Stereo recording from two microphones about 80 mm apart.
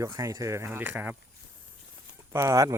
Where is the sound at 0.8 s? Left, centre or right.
Right.